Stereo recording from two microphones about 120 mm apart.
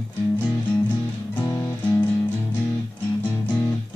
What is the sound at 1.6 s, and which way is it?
Music, 15° left (ahead or behind).